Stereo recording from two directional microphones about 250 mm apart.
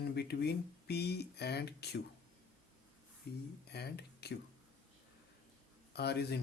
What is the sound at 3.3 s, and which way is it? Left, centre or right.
Speech, left.